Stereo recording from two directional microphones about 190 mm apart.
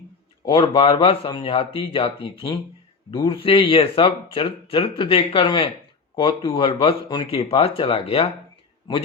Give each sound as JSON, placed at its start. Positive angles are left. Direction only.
{"t": 0.4, "sound": "speech", "side_deg": 25}